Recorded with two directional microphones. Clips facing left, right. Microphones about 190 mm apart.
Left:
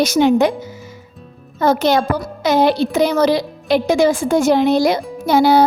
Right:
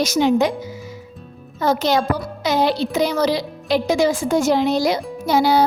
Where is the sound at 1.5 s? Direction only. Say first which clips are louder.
Left 3 dB; 55° left (ahead or behind).